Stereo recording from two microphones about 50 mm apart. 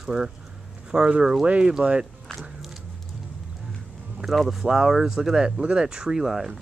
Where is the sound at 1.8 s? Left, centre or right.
Right.